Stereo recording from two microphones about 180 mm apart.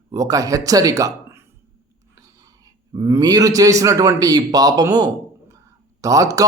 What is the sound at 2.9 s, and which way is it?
Speech, 20° right (ahead or behind).